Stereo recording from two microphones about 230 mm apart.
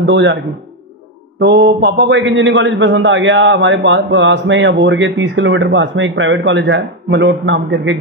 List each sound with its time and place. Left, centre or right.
0.0 s a man's voice: right
1.4 s a man's voice: right